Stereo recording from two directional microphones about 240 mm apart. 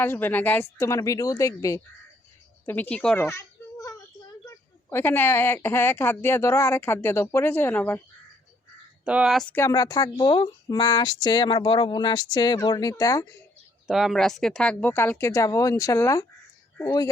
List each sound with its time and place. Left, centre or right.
0.0 s a woman's voice: centre
9.0 s a woman's voice: centre
13.8 s a woman's voice: centre